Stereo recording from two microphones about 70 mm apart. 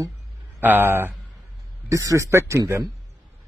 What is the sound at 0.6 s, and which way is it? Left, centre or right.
Speech, right.